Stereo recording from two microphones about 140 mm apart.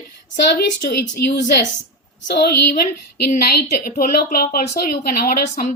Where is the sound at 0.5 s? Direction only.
90° left.